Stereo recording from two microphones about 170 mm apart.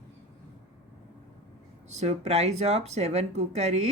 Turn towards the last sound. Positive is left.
turn(degrees=-40)  # may be behind; listen again after turning